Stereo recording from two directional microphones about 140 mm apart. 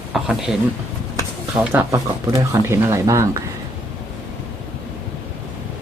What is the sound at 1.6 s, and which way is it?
Speech, 15° right (ahead or behind).